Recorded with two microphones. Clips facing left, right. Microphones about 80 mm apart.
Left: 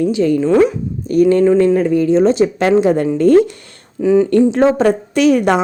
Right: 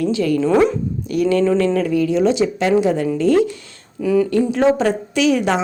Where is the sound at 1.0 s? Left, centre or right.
Left.